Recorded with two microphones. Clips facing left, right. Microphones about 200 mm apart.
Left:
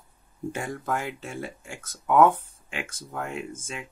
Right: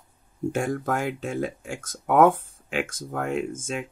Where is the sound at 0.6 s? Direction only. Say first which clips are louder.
Right 3 dB; 50° right (ahead or behind).